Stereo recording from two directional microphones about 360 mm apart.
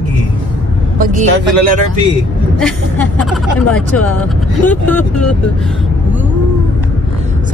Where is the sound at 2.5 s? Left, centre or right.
Centre.